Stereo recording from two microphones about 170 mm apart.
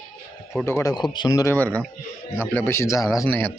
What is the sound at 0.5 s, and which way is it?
Speech, 15° left (ahead or behind).